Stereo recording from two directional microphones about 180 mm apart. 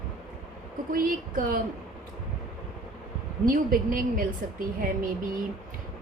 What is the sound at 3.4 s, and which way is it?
A woman's voice, 50° right (ahead or behind).